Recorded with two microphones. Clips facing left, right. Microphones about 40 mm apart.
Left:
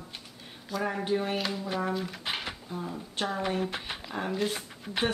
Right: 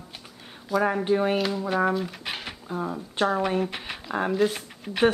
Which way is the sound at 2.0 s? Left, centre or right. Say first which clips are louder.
Right 2 dB; centre.